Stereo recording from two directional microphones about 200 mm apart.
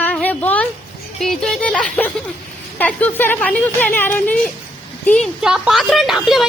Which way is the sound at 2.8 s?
10° left (ahead or behind).